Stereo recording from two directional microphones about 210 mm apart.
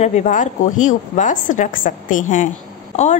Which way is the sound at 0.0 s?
35° left (ahead or behind).